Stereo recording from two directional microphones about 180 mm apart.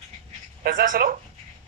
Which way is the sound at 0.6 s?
50° right (ahead or behind).